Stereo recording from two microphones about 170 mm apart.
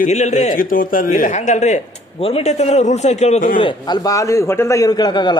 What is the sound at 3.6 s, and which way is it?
A man's voice, 25° left (ahead or behind).